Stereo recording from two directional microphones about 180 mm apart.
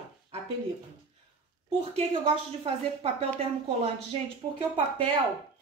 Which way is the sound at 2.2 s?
35° right (ahead or behind).